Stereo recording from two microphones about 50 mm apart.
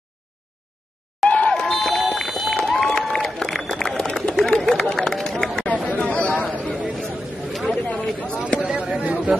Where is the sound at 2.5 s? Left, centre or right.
Centre.